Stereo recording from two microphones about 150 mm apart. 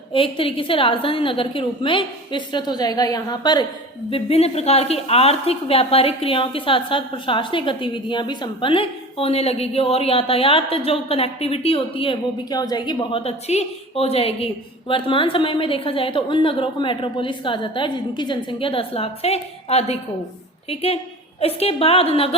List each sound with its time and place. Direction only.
0.1 s a woman's voice: 35° left (ahead or behind)
4.1 s a woman's voice: 45° left (ahead or behind)